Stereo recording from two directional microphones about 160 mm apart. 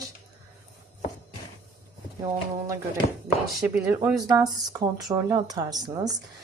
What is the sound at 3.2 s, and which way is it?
Speech, 10° right (ahead or behind).